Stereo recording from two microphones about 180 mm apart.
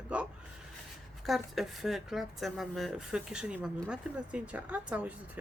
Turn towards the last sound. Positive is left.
turn(degrees=-5)  # may be behind; listen again after turning